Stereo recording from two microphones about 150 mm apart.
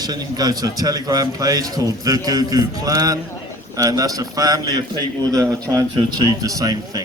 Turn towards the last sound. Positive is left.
turn(degrees=-25)  # may be behind; listen again after turning